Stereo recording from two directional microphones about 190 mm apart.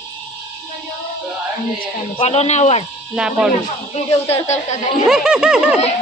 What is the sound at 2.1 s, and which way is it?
Speech, 35° left (ahead or behind).